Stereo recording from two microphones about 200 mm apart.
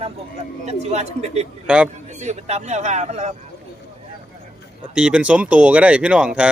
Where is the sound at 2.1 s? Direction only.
35° right (ahead or behind).